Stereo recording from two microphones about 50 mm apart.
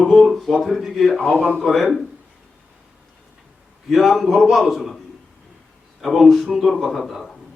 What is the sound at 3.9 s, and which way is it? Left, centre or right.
A man's voice, centre.